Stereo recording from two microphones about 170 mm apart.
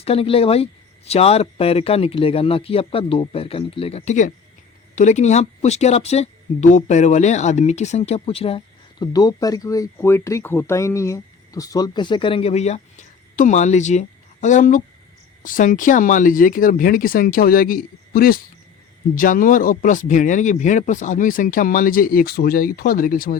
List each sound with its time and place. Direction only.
0.0 s speech: 35° left (ahead or behind); by 23.4 s 55° left (ahead or behind)